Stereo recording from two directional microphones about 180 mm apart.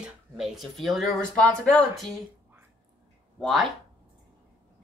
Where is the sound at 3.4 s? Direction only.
Centre (ahead or behind).